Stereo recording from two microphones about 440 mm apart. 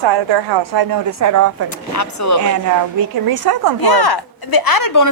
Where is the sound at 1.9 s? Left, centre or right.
Left.